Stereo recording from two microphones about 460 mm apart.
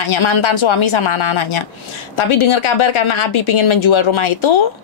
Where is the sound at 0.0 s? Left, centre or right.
Left.